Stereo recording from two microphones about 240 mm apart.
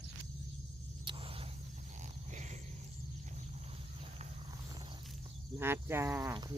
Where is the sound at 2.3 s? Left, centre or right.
Right.